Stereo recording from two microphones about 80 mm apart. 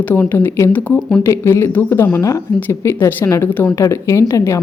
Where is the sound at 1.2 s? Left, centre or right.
Left.